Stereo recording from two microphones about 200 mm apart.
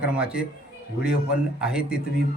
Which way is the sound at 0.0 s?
5° right (ahead or behind).